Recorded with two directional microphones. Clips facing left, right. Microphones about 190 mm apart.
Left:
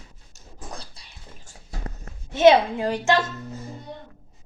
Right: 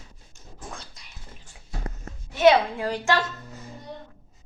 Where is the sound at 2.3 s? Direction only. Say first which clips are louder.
Left 3 dB; 25° left (ahead or behind).